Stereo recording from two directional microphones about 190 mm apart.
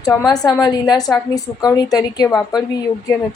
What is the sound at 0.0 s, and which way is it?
A woman's voice, 15° left (ahead or behind).